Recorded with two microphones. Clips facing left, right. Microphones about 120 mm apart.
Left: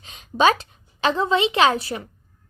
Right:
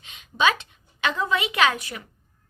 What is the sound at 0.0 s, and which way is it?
A woman's voice, 35° left (ahead or behind).